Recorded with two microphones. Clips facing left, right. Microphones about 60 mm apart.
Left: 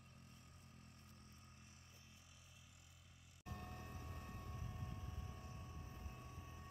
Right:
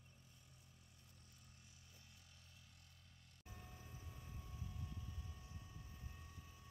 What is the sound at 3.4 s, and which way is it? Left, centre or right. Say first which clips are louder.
Vehicle: left 7 dB; left.